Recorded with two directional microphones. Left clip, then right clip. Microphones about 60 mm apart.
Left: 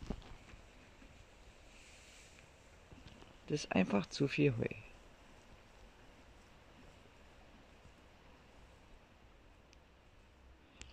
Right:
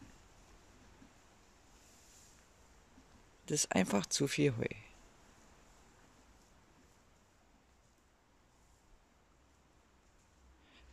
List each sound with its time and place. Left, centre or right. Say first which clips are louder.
3.4 s speech: right 2 dB; right